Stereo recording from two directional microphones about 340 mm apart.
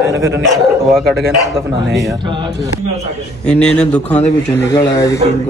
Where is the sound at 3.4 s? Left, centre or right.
Centre.